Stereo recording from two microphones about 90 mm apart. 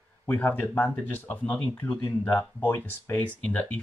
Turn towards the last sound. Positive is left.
turn(degrees=15)  # may be behind; listen again after turning